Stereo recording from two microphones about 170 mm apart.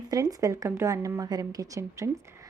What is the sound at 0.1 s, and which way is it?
A woman's voice, 20° right (ahead or behind).